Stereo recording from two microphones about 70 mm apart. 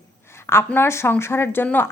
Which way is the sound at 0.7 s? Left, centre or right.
Left.